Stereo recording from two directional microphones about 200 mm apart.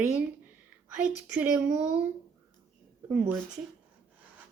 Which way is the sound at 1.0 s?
10° right (ahead or behind).